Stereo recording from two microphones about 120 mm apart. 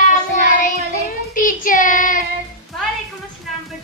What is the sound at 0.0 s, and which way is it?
Child singing, 90° left.